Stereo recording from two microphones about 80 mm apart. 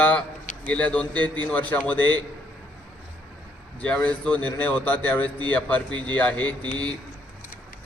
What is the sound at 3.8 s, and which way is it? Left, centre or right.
A man's voice, centre.